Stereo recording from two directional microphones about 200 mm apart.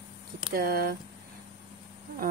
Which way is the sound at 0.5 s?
50° right (ahead or behind).